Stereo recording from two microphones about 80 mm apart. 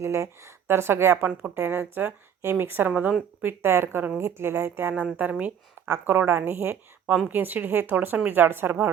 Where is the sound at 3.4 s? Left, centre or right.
Right.